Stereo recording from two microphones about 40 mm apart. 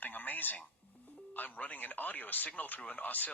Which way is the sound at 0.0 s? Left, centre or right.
Left.